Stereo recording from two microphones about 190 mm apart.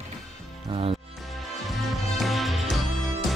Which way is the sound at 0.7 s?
30° right (ahead or behind).